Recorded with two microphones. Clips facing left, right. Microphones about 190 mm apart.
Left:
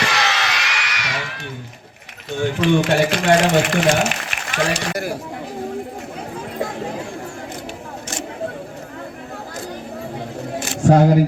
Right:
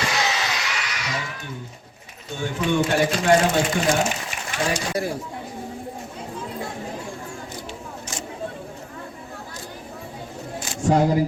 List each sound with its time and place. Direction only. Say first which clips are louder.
0.0 s a sound: left 3 dB; 80° left
2.4 s speech: left 5 dB; 75° left (ahead or behind)
6.4 s chatter: left 6 dB; 80° left
10.6 s camera: left 5 dB; 70° left (ahead or behind)